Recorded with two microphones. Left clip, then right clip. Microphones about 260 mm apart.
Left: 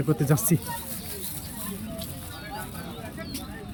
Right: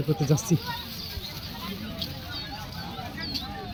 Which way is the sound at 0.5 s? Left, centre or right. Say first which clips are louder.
Left 1 dB; centre.